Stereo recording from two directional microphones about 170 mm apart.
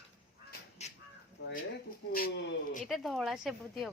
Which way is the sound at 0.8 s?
40° left (ahead or behind).